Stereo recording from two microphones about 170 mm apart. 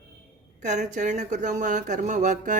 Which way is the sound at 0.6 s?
45° right (ahead or behind).